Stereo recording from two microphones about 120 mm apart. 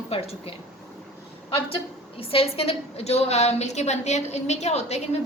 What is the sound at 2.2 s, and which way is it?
A woman's voice, 50° left (ahead or behind).